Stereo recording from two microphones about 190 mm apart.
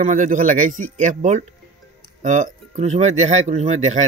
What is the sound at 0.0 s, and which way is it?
Speech, 45° right (ahead or behind).